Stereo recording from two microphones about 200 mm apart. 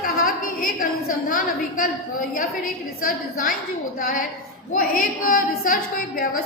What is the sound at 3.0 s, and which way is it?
Speech, 45° left (ahead or behind).